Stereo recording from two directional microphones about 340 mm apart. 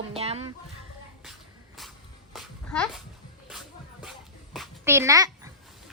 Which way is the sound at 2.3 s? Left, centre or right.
Centre.